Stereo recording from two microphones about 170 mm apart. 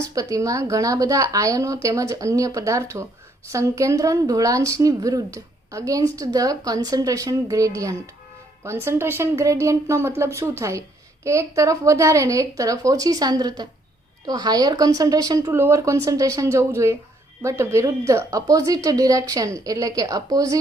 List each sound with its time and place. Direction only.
0.0 s a woman's voice: 20° right (ahead or behind)